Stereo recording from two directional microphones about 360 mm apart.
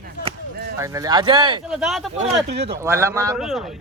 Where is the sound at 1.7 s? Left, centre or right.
Centre.